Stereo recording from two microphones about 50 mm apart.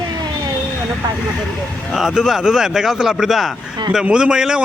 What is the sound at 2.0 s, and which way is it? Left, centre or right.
A man's voice, centre.